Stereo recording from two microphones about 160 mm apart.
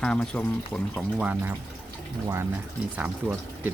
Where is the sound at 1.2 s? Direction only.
10° right (ahead or behind).